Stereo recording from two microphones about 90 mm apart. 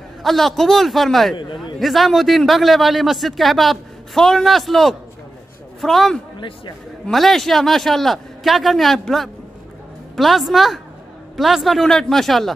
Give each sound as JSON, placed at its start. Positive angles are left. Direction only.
{"t": 0.2, "sound": "a man's voice", "side_deg": 5}
{"t": 1.3, "sound": "a man's voice", "side_deg": 60}
{"t": 1.8, "sound": "a man's voice", "side_deg": 0}